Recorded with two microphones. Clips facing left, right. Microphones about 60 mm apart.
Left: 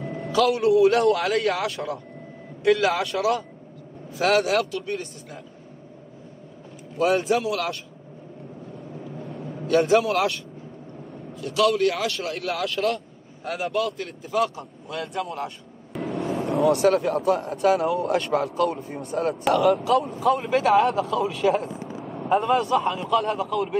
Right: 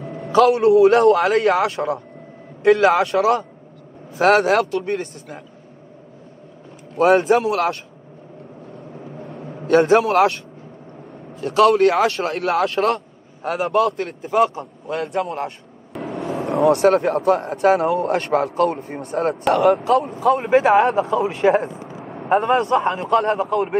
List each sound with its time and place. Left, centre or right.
0.0 s a sound: centre
0.4 s a man's voice: right
4.1 s a man's voice: right
7.0 s a man's voice: right
9.7 s a man's voice: right
14.5 s a man's voice: right
15.0 s a man's voice: right
15.9 s a sound: centre
16.4 s a man's voice: right